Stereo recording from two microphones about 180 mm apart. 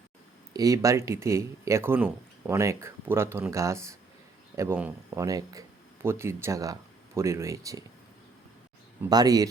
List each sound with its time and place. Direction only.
0.5 s speech: 20° right (ahead or behind)
9.0 s speech: 20° right (ahead or behind)